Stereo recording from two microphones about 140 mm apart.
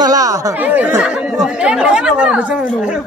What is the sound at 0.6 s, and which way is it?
Speech, 10° right (ahead or behind).